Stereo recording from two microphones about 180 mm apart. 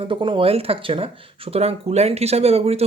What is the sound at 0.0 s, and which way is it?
Speech, 30° right (ahead or behind).